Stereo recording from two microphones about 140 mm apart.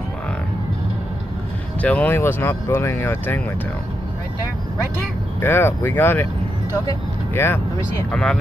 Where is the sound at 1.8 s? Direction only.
10° left (ahead or behind).